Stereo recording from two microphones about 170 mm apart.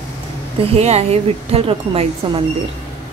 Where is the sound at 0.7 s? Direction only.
35° right (ahead or behind).